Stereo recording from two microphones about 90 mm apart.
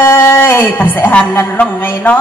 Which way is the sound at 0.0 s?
30° left (ahead or behind).